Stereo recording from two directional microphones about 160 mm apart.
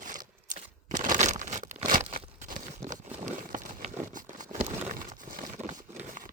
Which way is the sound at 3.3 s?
55° right (ahead or behind).